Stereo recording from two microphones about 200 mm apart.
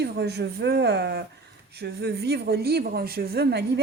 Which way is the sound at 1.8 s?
55° right (ahead or behind).